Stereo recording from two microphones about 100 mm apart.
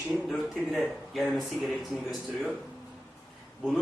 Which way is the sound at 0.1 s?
Centre (ahead or behind).